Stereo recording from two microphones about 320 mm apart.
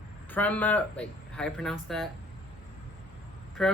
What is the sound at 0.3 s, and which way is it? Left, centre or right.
A woman's voice, centre.